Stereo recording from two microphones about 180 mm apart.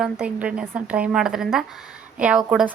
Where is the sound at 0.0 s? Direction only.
5° right (ahead or behind).